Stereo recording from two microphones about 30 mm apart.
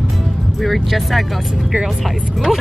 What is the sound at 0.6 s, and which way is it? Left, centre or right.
Speech, centre.